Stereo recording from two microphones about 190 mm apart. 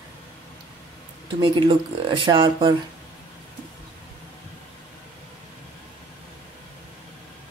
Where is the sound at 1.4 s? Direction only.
25° right (ahead or behind).